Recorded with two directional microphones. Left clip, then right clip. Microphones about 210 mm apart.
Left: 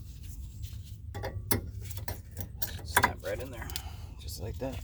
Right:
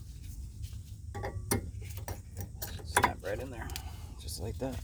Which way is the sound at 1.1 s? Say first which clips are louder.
Even; 5° right (ahead or behind).